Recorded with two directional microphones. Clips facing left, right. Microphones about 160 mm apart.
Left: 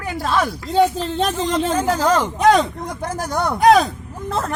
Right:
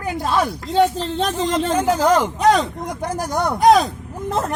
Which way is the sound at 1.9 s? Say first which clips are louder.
Right 3 dB; 15° right (ahead or behind).